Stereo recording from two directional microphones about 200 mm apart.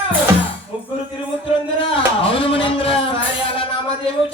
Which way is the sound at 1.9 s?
30° left (ahead or behind).